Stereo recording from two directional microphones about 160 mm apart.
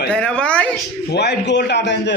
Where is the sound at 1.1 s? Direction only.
90° left.